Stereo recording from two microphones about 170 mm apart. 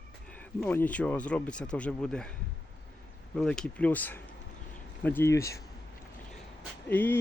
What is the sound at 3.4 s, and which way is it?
Speech, 5° left (ahead or behind).